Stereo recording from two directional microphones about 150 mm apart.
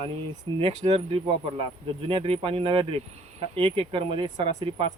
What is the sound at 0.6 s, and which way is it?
Speech, 45° right (ahead or behind).